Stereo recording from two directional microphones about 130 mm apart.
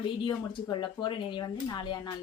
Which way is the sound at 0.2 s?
35° left (ahead or behind).